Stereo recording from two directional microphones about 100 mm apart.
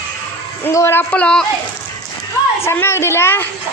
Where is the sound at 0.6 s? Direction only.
25° left (ahead or behind).